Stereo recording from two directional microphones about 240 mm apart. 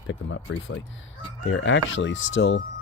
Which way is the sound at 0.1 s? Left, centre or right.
Left.